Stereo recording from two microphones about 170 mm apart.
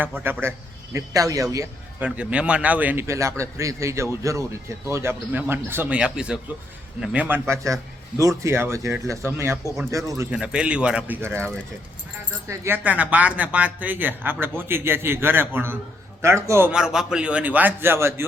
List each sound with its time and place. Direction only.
0.0 s a man's voice: 10° right (ahead or behind)
10.3 s a man's voice: 5° right (ahead or behind)